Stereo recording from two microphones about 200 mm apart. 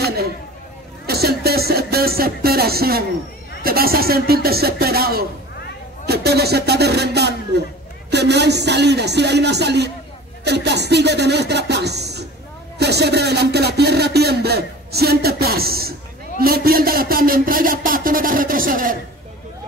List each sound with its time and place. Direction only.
0.0 s a sound: 50° right (ahead or behind)
1.0 s music: 50° right (ahead or behind)
3.6 s speech: 50° right (ahead or behind)